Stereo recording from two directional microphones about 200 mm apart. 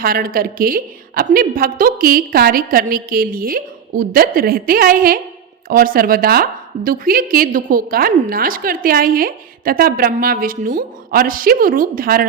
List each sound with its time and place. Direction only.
0.0 s a woman's voice: 45° right (ahead or behind)